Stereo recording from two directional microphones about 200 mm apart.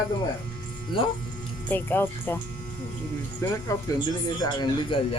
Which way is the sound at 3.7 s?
15° left (ahead or behind).